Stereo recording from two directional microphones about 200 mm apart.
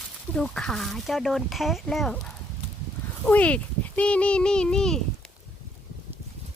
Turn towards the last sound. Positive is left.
turn(degrees=5)  # may be behind; listen again after turning